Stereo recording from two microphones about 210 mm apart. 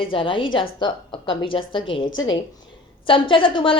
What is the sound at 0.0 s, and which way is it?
A woman's voice, 25° left (ahead or behind).